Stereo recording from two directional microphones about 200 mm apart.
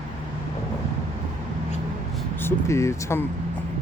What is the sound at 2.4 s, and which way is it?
Speech, 15° left (ahead or behind).